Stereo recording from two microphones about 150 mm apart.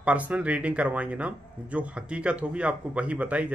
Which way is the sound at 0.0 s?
10° right (ahead or behind).